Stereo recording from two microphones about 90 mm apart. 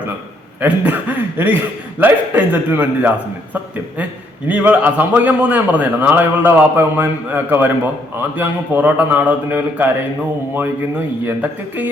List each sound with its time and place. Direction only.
0.6 s a man's voice: 20° right (ahead or behind)
4.4 s a man's voice: 20° right (ahead or behind)
11.3 s a man's voice: 20° right (ahead or behind)